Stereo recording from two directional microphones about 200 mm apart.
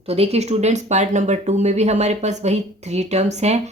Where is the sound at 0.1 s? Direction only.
30° right (ahead or behind).